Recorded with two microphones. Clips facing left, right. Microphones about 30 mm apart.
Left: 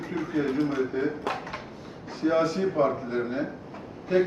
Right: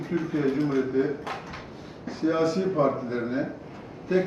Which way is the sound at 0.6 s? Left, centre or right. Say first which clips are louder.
Even; left.